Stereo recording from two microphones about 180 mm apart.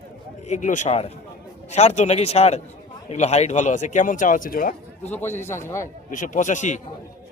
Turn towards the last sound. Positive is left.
turn(degrees=40)  # may be behind; listen again after turning